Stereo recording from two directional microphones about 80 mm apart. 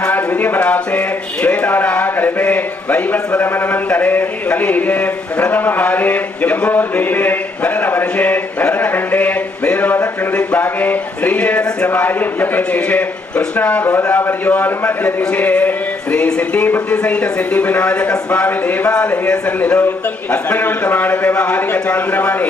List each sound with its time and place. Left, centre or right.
0.0 s speech: left